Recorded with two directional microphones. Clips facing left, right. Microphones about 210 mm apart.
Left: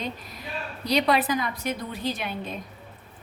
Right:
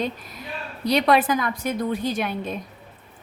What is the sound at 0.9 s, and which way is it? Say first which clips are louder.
Speech: right 4 dB; 50° right (ahead or behind).